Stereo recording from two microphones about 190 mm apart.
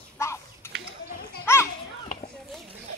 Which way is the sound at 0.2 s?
15° left (ahead or behind).